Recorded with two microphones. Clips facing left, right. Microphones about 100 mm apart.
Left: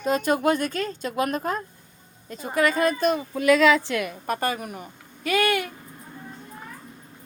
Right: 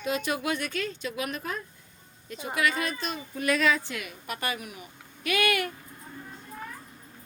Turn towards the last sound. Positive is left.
turn(degrees=30)  # may be behind; listen again after turning